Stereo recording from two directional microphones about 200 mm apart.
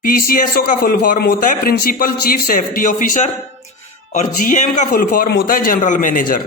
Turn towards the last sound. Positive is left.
turn(degrees=45)  # may be behind; listen again after turning